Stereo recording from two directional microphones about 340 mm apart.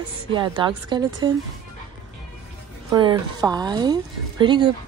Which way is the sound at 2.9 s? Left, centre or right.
Centre.